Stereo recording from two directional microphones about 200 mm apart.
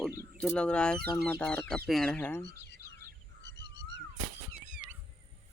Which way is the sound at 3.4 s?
60° left (ahead or behind).